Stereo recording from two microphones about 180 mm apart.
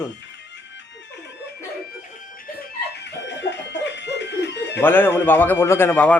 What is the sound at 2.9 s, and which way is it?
Chicken, 70° left (ahead or behind).